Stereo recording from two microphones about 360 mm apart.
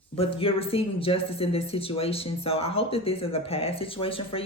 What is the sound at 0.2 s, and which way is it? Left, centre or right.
Speech, centre.